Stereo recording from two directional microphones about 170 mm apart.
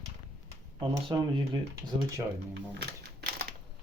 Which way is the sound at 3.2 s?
70° right (ahead or behind).